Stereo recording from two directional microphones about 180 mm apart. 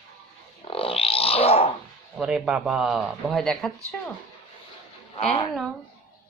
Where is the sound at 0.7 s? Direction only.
30° left (ahead or behind).